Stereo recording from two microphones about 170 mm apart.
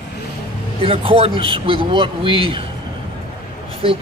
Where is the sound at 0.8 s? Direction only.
35° right (ahead or behind).